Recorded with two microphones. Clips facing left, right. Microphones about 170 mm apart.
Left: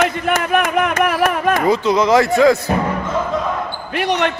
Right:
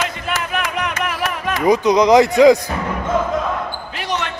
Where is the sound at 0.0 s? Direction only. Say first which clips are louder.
Left 6 dB; 55° left (ahead or behind).